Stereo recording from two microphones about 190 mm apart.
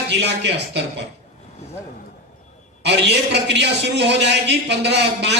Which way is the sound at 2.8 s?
65° right (ahead or behind).